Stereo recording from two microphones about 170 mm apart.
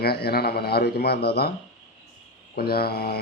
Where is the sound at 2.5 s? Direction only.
65° left (ahead or behind).